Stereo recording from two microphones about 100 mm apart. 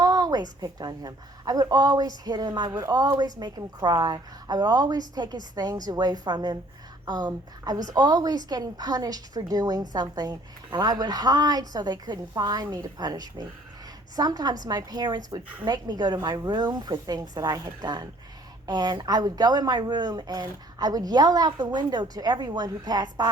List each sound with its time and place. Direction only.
0.0 s a woman's voice: 40° right (ahead or behind)